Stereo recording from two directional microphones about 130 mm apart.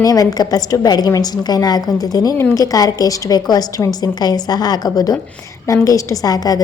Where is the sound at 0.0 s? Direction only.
30° left (ahead or behind).